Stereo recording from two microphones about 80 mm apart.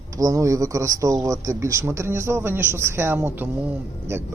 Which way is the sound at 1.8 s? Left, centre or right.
Right.